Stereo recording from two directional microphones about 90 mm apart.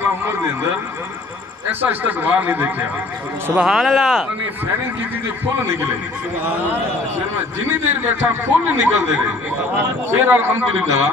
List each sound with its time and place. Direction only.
0.0 s a man's voice: 25° right (ahead or behind)
1.7 s speech: 20° right (ahead or behind)
3.5 s speech: 5° right (ahead or behind)
7.6 s speech: 25° right (ahead or behind)
10.2 s speech: 25° right (ahead or behind)